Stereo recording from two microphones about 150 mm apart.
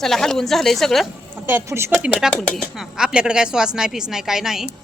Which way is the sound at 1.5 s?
15° right (ahead or behind).